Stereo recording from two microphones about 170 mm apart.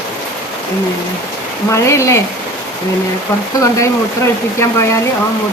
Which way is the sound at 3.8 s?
15° left (ahead or behind).